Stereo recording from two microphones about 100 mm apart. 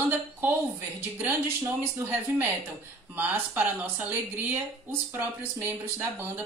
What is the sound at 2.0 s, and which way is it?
Speech, 20° right (ahead or behind).